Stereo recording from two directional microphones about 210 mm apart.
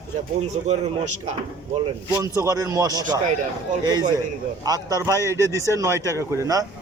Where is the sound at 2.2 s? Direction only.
15° right (ahead or behind).